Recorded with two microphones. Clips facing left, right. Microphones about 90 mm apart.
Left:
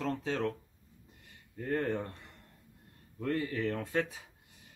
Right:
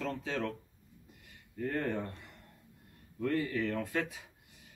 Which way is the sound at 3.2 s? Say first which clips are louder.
Even; 35° left (ahead or behind).